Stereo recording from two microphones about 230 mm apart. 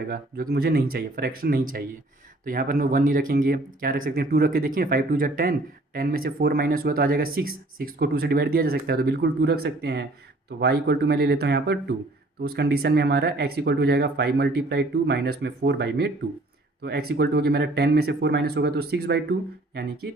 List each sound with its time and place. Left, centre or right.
0.1 s speech: right